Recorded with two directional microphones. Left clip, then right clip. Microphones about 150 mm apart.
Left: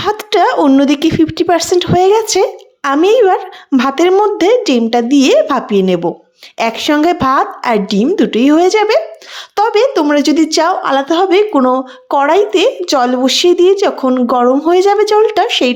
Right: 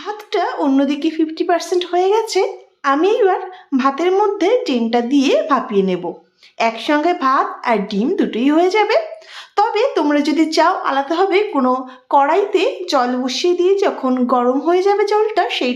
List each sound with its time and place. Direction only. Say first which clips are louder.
0.0 s speech: left 9 dB; 60° left (ahead or behind)
0.8 s a woman's voice: left 6 dB; 50° left (ahead or behind)